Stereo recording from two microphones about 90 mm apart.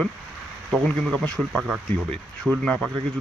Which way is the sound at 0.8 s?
10° left (ahead or behind).